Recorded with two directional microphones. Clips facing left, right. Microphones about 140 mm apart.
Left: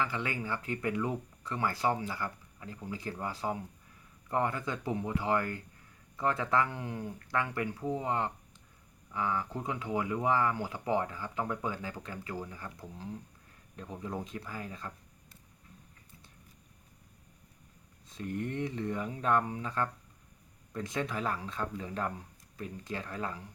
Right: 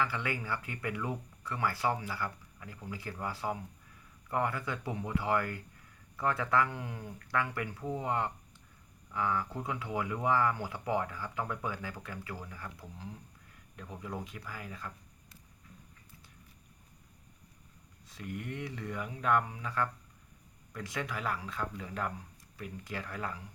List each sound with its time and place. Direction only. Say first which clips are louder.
0.0 s speech: even; 20° left (ahead or behind)
18.3 s speech: left 6 dB; 30° left (ahead or behind)